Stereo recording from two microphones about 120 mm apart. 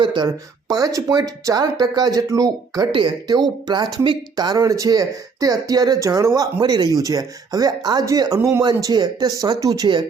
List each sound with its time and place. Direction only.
0.0 s speech: 40° right (ahead or behind)
0.7 s speech: 30° right (ahead or behind)
2.9 s speech: 40° right (ahead or behind)
8.4 s speech: 20° right (ahead or behind)
8.6 s speech: 35° right (ahead or behind)